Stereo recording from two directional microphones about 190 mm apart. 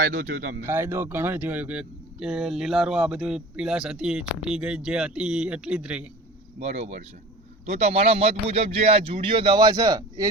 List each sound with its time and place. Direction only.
0.0 s speech: 40° right (ahead or behind)
0.6 s speech: 15° right (ahead or behind)
6.6 s speech: 35° right (ahead or behind); by 10.2 s 20° right (ahead or behind)